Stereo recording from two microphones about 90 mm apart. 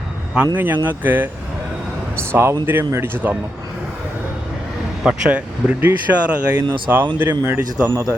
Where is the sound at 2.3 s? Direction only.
30° right (ahead or behind).